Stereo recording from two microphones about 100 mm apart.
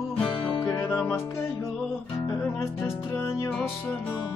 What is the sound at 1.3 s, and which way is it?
Music, 25° left (ahead or behind).